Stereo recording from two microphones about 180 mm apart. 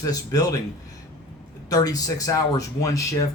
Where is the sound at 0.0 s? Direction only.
20° left (ahead or behind).